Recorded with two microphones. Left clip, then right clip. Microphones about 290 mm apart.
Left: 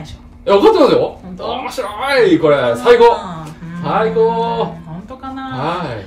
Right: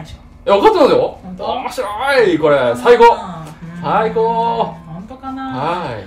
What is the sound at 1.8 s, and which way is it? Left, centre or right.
Speech, centre.